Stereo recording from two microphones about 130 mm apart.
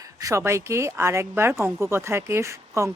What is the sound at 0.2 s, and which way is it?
Speech, 25° right (ahead or behind).